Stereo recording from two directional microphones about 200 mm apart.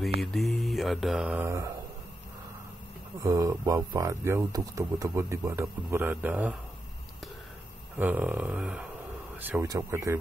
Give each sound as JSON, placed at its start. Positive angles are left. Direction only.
{"t": 0.2, "sound": "speech", "side_deg": 0}
{"t": 3.2, "sound": "speech", "side_deg": -15}
{"t": 8.0, "sound": "speech", "side_deg": -10}